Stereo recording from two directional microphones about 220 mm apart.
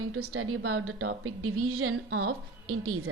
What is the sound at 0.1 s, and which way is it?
A woman's voice, 75° right (ahead or behind).